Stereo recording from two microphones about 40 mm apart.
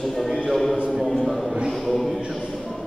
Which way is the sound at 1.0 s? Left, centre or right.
Centre.